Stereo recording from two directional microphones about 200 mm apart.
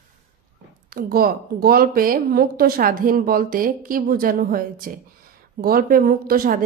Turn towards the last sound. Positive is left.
turn(degrees=-45)  # may be behind; listen again after turning